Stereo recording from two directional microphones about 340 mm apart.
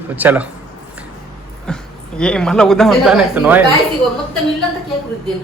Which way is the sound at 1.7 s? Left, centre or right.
Centre.